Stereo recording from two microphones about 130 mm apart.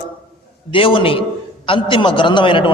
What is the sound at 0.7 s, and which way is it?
A man's voice, 40° left (ahead or behind).